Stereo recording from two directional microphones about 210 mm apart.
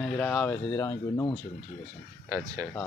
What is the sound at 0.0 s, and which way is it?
Speech, 5° left (ahead or behind).